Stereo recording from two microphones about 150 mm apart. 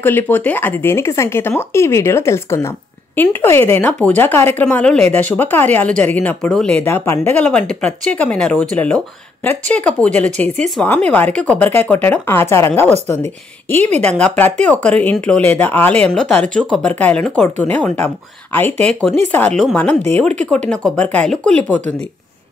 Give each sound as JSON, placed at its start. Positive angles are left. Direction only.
{"t": 0.0, "sound": "speech", "side_deg": 10}
{"t": 13.9, "sound": "speech", "side_deg": 10}